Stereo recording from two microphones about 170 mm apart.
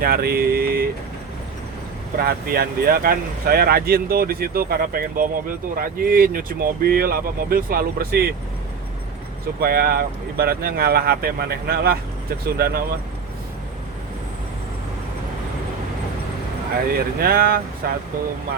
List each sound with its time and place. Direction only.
0.0 s speech: 65° right (ahead or behind)
2.1 s speech: 60° right (ahead or behind)
9.6 s speech: 65° right (ahead or behind)
16.9 s speech: 60° right (ahead or behind)